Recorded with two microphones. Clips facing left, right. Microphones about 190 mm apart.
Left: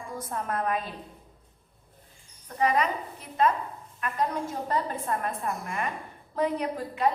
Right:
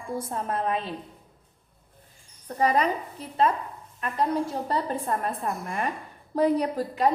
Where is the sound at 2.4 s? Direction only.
35° right (ahead or behind).